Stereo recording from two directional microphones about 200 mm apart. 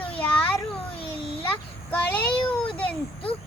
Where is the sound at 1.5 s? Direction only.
10° left (ahead or behind).